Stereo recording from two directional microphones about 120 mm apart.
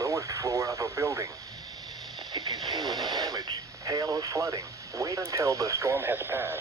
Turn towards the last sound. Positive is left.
turn(degrees=-20)  # may be behind; listen again after turning